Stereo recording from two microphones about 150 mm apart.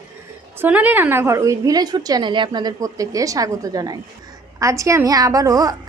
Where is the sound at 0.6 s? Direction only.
10° right (ahead or behind).